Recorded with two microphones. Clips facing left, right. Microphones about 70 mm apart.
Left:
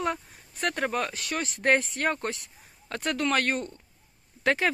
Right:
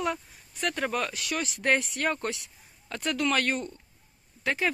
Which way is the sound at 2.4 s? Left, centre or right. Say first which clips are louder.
Left 2 dB; left.